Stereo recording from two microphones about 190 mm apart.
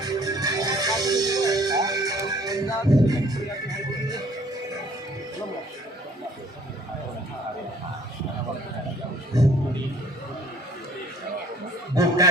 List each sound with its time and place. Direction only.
0.0 s music: 20° right (ahead or behind)
9.3 s music: 20° right (ahead or behind)
11.9 s snicker: 20° right (ahead or behind)